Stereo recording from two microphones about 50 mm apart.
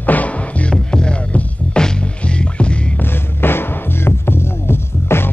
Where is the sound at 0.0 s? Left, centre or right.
Left.